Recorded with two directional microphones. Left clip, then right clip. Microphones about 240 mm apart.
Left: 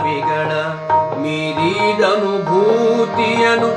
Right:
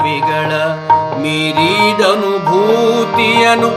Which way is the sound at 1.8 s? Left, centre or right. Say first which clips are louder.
Right 3 dB; right.